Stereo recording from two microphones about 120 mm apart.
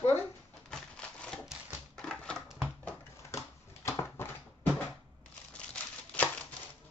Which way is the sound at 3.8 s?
20° left (ahead or behind).